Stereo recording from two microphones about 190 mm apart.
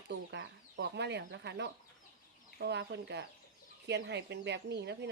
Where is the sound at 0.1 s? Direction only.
65° right (ahead or behind).